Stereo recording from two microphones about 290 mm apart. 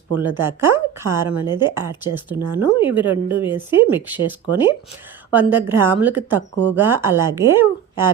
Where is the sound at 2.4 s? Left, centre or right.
Right.